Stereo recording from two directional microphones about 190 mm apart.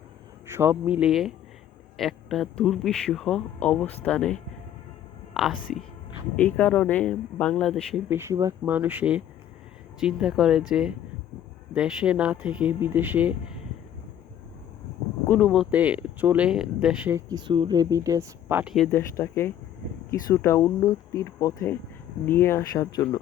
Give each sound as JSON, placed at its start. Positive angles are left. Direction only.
{"t": 0.5, "sound": "a man's voice", "side_deg": -10}
{"t": 8.1, "sound": "a man's voice", "side_deg": -15}
{"t": 15.3, "sound": "a man's voice", "side_deg": 5}
{"t": 15.7, "sound": "speech", "side_deg": -5}
{"t": 18.9, "sound": "speech", "side_deg": 15}